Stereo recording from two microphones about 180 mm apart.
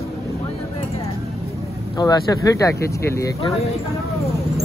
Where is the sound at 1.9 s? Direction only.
20° left (ahead or behind).